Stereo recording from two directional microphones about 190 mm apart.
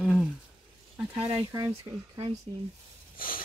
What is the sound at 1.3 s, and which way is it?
Speech, 20° right (ahead or behind).